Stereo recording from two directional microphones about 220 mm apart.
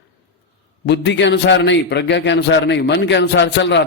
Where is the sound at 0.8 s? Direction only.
50° left (ahead or behind).